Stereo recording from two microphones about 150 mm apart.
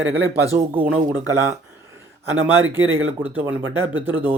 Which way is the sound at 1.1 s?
20° right (ahead or behind).